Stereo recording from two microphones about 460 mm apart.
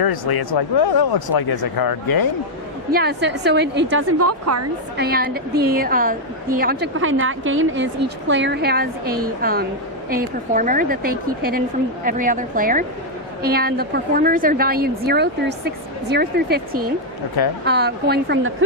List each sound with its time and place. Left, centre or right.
0.0 s speech: left
2.9 s a woman's voice: right
4.9 s a woman's voice: centre